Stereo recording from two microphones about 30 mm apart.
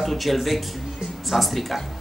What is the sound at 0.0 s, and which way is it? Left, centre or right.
Speech, centre.